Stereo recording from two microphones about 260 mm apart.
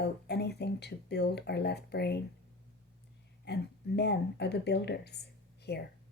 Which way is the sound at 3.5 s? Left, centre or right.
Left.